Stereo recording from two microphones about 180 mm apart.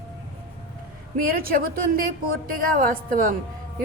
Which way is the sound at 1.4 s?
50° right (ahead or behind).